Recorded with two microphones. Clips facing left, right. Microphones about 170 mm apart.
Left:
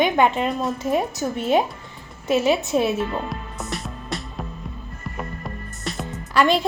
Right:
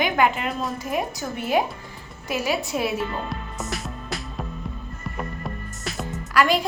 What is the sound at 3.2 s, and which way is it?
Music, centre (ahead or behind).